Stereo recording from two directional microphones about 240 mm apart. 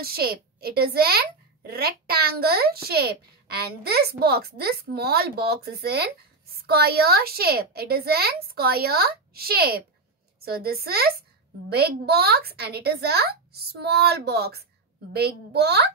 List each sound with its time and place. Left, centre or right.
0.0 s a woman's voice: right